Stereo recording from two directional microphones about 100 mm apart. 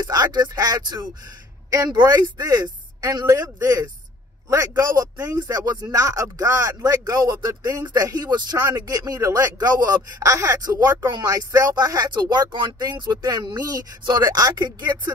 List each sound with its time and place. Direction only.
0.0 s a woman's voice: 40° right (ahead or behind)